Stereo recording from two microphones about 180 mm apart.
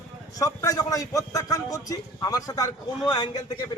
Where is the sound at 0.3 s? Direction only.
20° left (ahead or behind).